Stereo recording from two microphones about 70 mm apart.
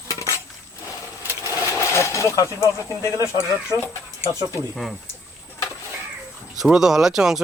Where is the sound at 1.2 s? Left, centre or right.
Left.